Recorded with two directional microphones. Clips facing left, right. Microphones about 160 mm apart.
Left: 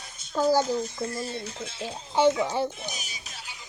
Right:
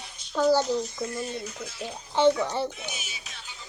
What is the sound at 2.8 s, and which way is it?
Music, 40° left (ahead or behind).